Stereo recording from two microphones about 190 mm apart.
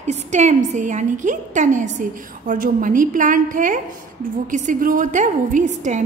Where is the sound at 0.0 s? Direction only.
40° right (ahead or behind).